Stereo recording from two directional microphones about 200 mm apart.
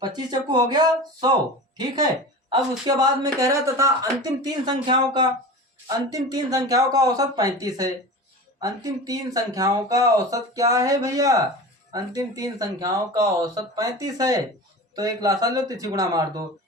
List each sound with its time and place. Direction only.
0.0 s speech: 20° right (ahead or behind)
2.5 s speech: 20° right (ahead or behind)